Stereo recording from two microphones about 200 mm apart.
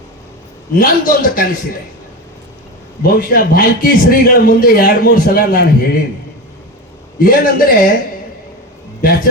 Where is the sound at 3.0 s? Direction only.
45° left (ahead or behind).